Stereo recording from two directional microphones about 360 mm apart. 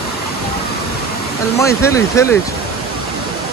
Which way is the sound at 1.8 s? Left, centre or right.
Centre.